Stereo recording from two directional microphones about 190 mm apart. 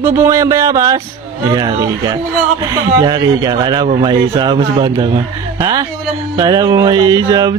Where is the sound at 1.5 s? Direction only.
25° right (ahead or behind).